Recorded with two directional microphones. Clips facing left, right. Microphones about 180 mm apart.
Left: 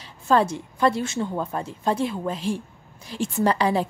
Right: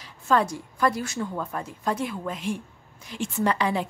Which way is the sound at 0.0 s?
30° left (ahead or behind).